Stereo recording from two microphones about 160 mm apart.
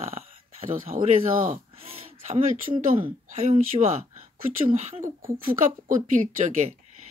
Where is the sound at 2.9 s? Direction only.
40° right (ahead or behind).